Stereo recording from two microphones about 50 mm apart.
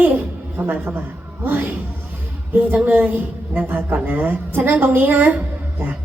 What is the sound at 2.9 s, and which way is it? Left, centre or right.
Speech, right.